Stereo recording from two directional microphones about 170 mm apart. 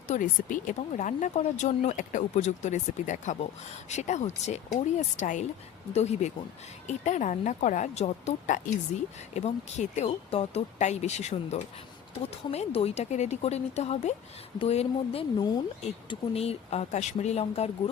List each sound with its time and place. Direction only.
0.1 s a woman's voice: 50° left (ahead or behind)